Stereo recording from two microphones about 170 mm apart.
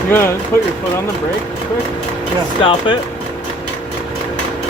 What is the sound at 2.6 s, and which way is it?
Speech, 30° left (ahead or behind).